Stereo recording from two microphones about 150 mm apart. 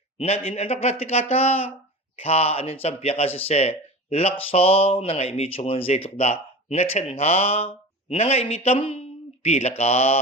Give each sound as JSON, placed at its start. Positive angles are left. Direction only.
{"t": 0.2, "sound": "speech", "side_deg": 45}